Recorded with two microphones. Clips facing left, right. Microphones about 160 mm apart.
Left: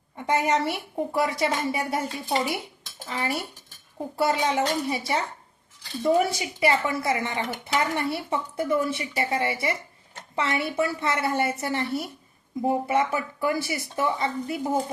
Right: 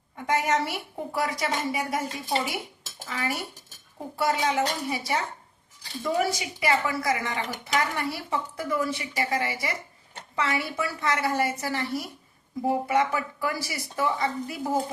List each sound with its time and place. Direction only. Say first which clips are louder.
0.3 s a woman's voice: left 2 dB; 30° left (ahead or behind)
3.1 s a woman's voice: left 2 dB; 30° left (ahead or behind)